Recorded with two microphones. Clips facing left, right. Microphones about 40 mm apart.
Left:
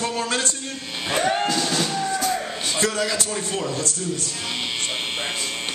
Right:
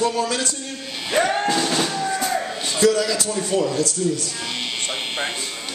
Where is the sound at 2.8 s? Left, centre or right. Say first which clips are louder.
Right 6 dB; left.